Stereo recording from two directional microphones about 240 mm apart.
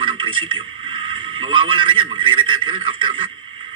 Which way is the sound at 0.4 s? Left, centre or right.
Right.